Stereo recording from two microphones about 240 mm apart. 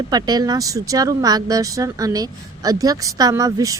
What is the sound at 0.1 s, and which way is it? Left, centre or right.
Speech, centre.